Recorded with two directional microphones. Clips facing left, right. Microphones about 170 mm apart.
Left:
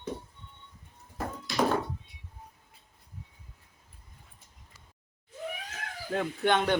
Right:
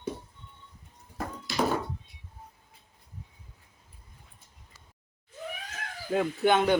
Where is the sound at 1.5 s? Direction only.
Centre (ahead or behind).